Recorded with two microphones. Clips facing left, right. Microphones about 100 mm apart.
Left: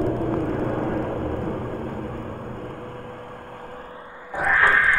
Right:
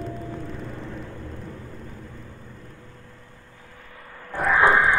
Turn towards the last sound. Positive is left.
turn(degrees=-20)  # may be behind; listen again after turning